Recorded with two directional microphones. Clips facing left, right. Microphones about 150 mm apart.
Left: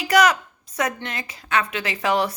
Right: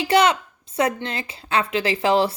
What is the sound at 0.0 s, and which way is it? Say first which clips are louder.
A woman's voice: right 1 dB; 25° right (ahead or behind).